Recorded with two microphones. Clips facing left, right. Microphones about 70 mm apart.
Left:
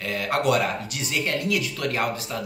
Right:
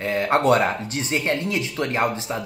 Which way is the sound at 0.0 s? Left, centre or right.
Right.